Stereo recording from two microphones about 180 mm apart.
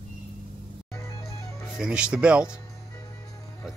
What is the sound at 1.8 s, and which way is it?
Speech, 5° right (ahead or behind).